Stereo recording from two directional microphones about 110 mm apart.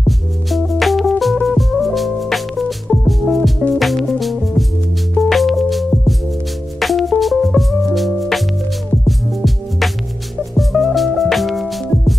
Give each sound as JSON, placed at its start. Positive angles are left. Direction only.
{"t": 0.5, "sound": "music", "side_deg": 0}